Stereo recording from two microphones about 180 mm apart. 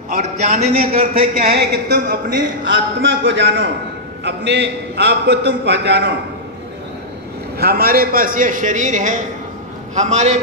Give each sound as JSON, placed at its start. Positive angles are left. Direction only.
{"t": 0.2, "sound": "a man's voice", "side_deg": -35}
{"t": 1.5, "sound": "speech", "side_deg": -65}
{"t": 7.5, "sound": "a man's voice", "side_deg": -60}